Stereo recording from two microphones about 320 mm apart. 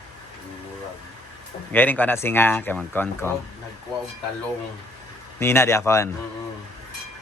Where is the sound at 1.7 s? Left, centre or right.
Centre.